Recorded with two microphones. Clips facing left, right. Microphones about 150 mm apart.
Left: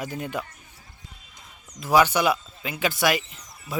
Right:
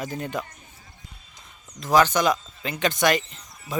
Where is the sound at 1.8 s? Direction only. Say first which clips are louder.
Even; 10° left (ahead or behind).